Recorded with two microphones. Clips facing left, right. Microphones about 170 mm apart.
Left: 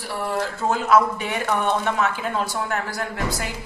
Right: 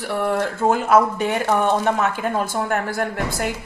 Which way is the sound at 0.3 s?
50° right (ahead or behind).